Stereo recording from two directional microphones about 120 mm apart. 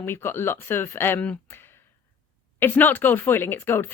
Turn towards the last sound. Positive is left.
turn(degrees=20)  # may be behind; listen again after turning